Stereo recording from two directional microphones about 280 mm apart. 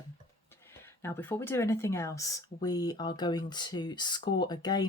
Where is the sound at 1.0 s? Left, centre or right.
Centre.